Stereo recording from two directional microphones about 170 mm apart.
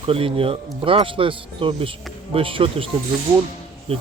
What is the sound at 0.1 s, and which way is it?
Speech, 30° right (ahead or behind).